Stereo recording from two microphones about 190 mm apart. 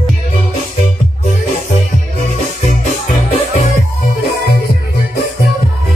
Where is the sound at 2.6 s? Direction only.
40° left (ahead or behind).